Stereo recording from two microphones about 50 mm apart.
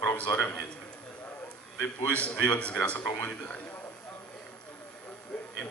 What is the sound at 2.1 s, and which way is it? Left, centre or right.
Speech, left.